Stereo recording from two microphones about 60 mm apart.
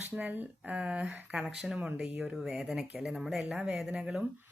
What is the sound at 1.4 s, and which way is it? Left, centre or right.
Speech, centre.